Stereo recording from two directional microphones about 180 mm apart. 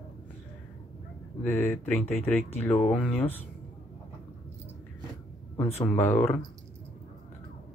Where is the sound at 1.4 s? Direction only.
15° left (ahead or behind).